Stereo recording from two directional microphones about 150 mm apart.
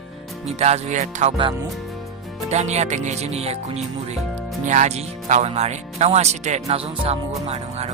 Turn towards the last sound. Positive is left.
turn(degrees=-45)  # may be behind; listen again after turning